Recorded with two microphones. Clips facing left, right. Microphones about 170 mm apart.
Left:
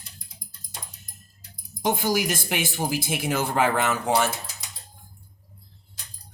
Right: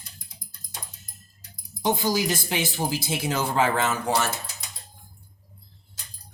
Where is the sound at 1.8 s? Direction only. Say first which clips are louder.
Even; 15° left (ahead or behind).